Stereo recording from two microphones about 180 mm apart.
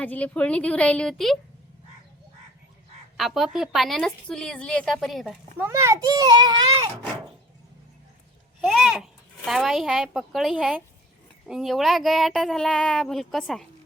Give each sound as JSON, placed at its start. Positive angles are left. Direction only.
{"t": 0.0, "sound": "a woman's voice", "side_deg": 10}
{"t": 3.2, "sound": "a woman's voice", "side_deg": 0}
{"t": 5.5, "sound": "a child's voice", "side_deg": -15}
{"t": 8.6, "sound": "a child's voice", "side_deg": 0}